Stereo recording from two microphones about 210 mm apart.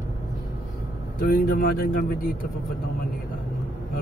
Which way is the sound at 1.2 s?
45° left (ahead or behind).